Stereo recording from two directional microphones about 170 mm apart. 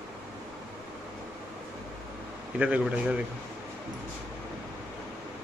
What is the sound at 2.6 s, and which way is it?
Speech, 5° right (ahead or behind).